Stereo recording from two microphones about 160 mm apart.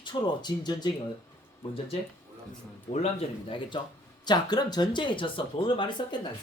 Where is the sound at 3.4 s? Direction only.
30° left (ahead or behind).